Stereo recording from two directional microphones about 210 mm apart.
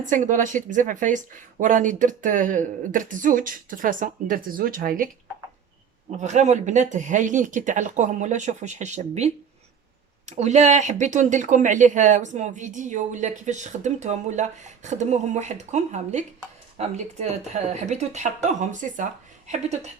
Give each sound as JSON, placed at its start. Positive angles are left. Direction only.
{"t": 0.0, "sound": "speech", "side_deg": -35}
{"t": 6.1, "sound": "speech", "side_deg": -35}